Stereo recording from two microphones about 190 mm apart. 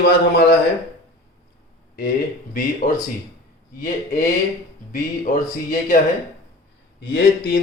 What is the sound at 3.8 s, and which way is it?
Speech, 45° left (ahead or behind).